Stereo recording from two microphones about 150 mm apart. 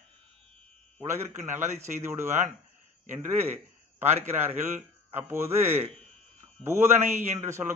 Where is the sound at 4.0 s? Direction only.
15° right (ahead or behind).